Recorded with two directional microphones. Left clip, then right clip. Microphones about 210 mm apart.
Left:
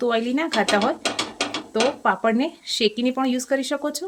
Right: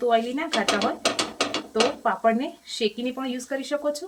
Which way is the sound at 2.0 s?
50° left (ahead or behind).